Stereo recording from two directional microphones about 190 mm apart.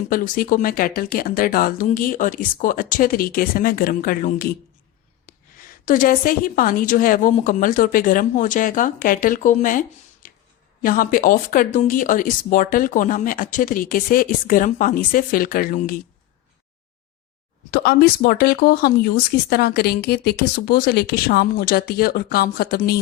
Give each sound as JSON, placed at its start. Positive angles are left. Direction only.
{"t": 0.1, "sound": "speech", "side_deg": 45}
{"t": 5.8, "sound": "speech", "side_deg": 45}
{"t": 10.8, "sound": "speech", "side_deg": 45}
{"t": 17.7, "sound": "speech", "side_deg": 55}